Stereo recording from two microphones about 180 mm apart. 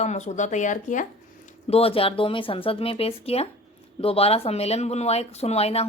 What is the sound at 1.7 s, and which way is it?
Speech, 30° left (ahead or behind).